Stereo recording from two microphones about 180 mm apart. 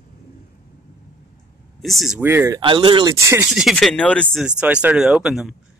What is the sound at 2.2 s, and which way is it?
Speech, 15° right (ahead or behind).